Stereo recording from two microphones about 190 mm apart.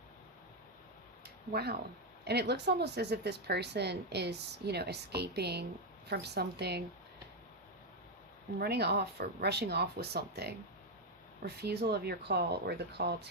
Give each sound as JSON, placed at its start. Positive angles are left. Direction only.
{"t": 1.2, "sound": "a sound", "side_deg": -55}
{"t": 2.2, "sound": "speech", "side_deg": -60}
{"t": 8.5, "sound": "speech", "side_deg": -55}